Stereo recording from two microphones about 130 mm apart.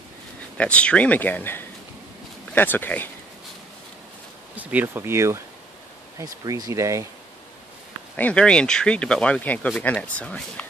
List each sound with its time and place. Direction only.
0.6 s speech: 10° left (ahead or behind)
4.6 s speech: 10° right (ahead or behind)
8.2 s speech: 10° left (ahead or behind)